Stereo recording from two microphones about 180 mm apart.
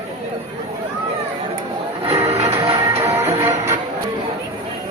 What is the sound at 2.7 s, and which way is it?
Music, 15° right (ahead or behind).